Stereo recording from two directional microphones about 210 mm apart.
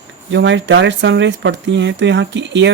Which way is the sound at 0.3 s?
60° right (ahead or behind).